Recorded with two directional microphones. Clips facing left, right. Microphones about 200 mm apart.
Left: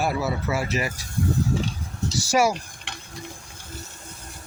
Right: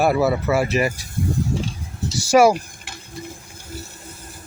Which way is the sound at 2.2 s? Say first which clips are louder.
Right 7 dB; 55° right (ahead or behind).